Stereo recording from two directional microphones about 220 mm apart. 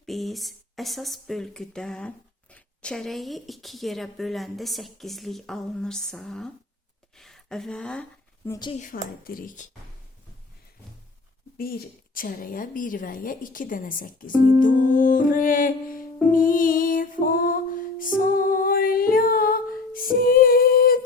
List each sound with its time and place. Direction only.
0.0 s speech: centre (ahead or behind)
8.4 s speech: 15° left (ahead or behind)
8.8 s a woman's voice: 40° left (ahead or behind)
12.1 s a woman's voice: 40° left (ahead or behind)
16.3 s music: 40° left (ahead or behind)